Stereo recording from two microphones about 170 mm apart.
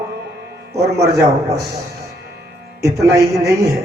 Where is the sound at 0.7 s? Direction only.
20° right (ahead or behind).